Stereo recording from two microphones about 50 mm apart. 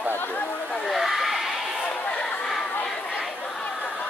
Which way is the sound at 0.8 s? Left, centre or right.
Centre.